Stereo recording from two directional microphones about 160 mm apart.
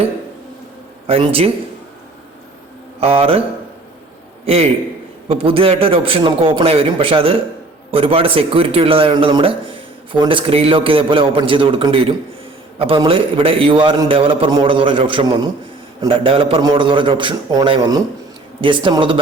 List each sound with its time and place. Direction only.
1.0 s a man's voice: 35° right (ahead or behind)
3.0 s a man's voice: 35° right (ahead or behind)
4.4 s a man's voice: 40° right (ahead or behind)